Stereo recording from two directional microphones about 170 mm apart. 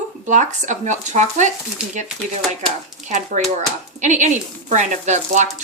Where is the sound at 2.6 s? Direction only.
45° right (ahead or behind).